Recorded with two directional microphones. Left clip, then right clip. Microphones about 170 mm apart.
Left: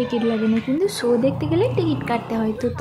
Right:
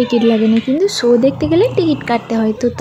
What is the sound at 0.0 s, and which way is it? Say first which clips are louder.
A woman's voice: right 8 dB; 30° right (ahead or behind).